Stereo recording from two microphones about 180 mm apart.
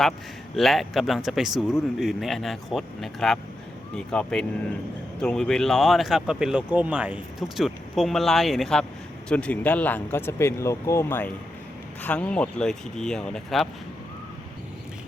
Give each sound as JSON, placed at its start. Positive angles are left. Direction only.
{"t": 0.5, "sound": "speech", "side_deg": 0}